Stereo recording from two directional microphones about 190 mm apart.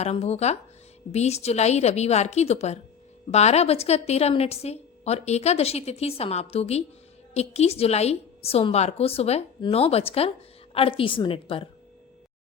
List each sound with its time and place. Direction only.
0.0 s a woman's voice: 35° left (ahead or behind)